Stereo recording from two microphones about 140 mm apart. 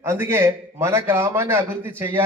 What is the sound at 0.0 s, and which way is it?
A man's voice, 20° right (ahead or behind).